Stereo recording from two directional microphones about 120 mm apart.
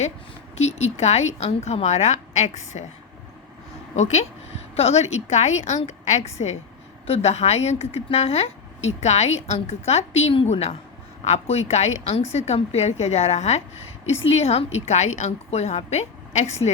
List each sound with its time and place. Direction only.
0.5 s a woman's voice: 65° left (ahead or behind)
3.9 s a woman's voice: 70° left (ahead or behind)